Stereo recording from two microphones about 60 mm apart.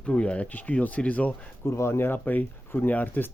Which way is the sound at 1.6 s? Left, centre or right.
Left.